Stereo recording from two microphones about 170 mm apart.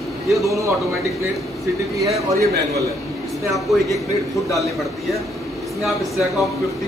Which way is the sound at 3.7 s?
Centre (ahead or behind).